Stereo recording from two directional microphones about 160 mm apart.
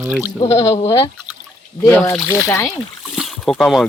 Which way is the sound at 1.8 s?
15° left (ahead or behind).